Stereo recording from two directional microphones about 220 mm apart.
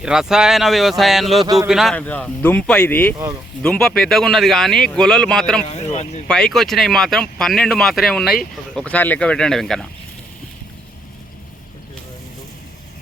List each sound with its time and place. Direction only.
0.0 s speech: 5° right (ahead or behind)
5.6 s speech: 30° left (ahead or behind)
6.2 s speech: 5° left (ahead or behind)